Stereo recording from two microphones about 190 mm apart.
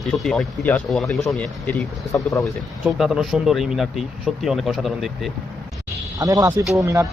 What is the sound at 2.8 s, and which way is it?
A man's voice, 5° right (ahead or behind).